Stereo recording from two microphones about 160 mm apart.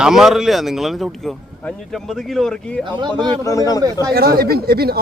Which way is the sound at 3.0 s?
30° right (ahead or behind).